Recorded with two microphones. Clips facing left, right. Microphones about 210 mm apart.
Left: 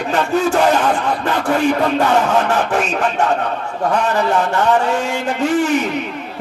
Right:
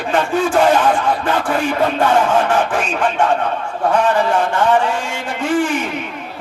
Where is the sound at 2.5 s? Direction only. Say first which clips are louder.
Even; 40° left (ahead or behind).